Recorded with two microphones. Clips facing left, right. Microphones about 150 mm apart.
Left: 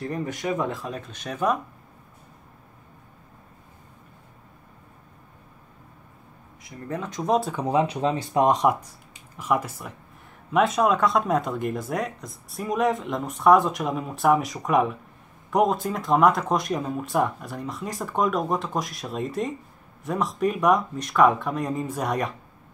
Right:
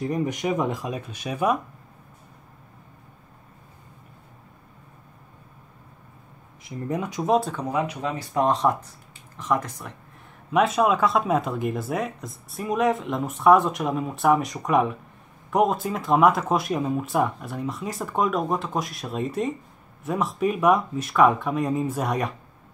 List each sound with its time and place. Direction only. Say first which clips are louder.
0.0 s speech: right 3 dB; 15° right (ahead or behind)
6.7 s speech: right 4 dB; 15° right (ahead or behind)
7.6 s speech: left 4 dB; 30° left (ahead or behind)
8.5 s speech: left 1 dB; 10° left (ahead or behind)